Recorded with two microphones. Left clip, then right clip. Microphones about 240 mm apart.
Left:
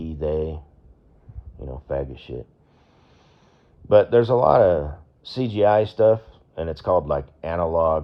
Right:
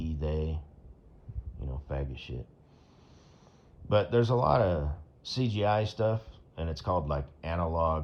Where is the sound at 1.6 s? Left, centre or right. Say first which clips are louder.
Left 12 dB; left.